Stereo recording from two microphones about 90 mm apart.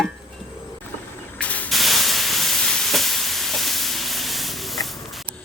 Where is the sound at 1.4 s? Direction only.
15° left (ahead or behind).